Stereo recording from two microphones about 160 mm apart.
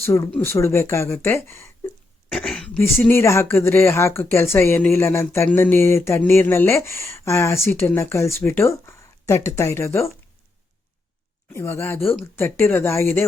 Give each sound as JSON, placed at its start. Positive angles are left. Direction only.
{"t": 0.0, "sound": "speech", "side_deg": 15}
{"t": 2.3, "sound": "a sound", "side_deg": 5}
{"t": 2.8, "sound": "speech", "side_deg": 15}
{"t": 11.5, "sound": "speech", "side_deg": 15}